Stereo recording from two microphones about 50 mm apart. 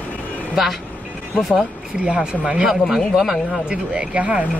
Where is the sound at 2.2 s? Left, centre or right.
Centre.